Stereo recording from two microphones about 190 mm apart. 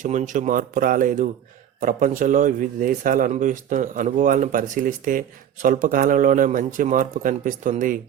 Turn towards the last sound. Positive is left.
turn(degrees=-45)  # may be behind; listen again after turning